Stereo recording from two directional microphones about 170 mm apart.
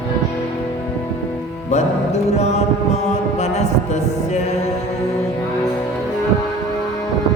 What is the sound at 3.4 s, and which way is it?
Music, 40° left (ahead or behind).